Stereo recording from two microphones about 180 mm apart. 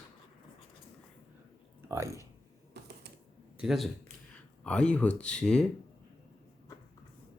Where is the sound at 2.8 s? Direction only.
70° right (ahead or behind).